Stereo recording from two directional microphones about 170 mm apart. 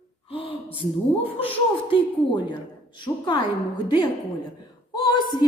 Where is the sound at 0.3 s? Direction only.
35° left (ahead or behind).